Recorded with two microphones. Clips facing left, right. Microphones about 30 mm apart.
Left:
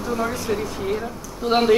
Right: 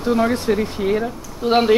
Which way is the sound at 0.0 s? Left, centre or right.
Right.